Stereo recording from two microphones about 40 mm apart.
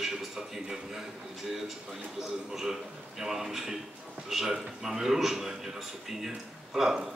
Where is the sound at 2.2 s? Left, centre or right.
Centre.